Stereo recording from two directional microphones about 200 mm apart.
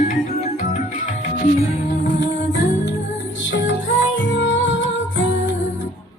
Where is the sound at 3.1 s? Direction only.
65° left (ahead or behind).